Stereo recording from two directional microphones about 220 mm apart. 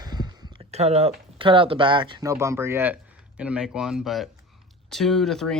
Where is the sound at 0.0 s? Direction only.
20° right (ahead or behind).